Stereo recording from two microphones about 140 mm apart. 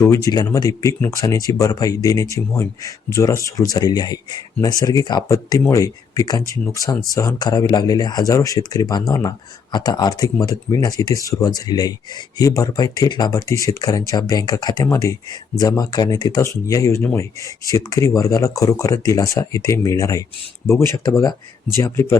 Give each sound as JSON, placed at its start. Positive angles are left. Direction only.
{"t": 0.0, "sound": "speech", "side_deg": 25}